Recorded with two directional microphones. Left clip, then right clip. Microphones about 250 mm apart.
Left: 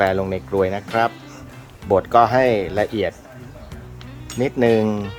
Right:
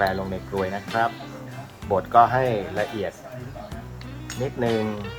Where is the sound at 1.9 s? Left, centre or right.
Left.